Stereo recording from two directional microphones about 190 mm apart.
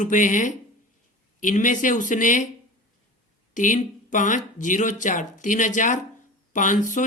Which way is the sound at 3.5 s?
40° left (ahead or behind).